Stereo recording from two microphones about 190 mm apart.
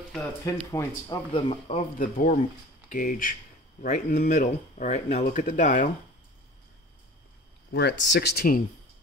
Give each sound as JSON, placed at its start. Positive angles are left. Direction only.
{"t": 0.5, "sound": "speech", "side_deg": 15}
{"t": 2.0, "sound": "speech", "side_deg": 45}
{"t": 7.7, "sound": "speech", "side_deg": 65}